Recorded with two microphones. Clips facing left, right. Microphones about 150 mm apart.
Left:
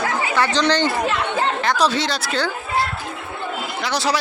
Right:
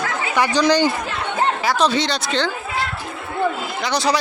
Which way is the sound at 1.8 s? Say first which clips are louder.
Right 1 dB; 5° left (ahead or behind).